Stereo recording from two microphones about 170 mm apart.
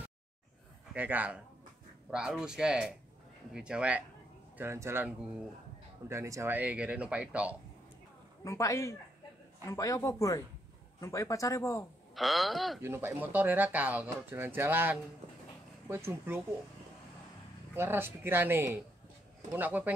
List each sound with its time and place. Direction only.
0.9 s speech: 10° right (ahead or behind)
8.5 s speech: 20° left (ahead or behind)
12.2 s speech: centre (ahead or behind)
12.8 s speech: 15° right (ahead or behind)
17.7 s speech: 15° right (ahead or behind)